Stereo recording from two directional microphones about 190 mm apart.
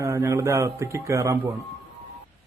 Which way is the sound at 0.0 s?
15° right (ahead or behind).